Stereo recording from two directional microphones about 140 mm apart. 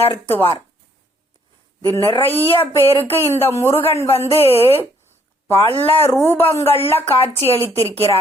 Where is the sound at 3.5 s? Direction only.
20° left (ahead or behind).